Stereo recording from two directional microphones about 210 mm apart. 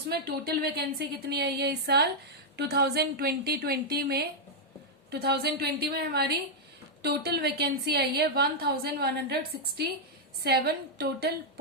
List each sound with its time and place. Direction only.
0.1 s a woman's voice: 50° right (ahead or behind)